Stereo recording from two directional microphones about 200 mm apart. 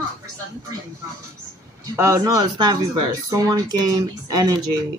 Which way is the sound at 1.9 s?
15° right (ahead or behind).